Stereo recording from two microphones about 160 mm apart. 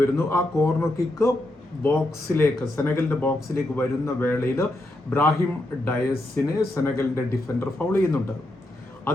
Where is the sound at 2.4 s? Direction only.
15° left (ahead or behind).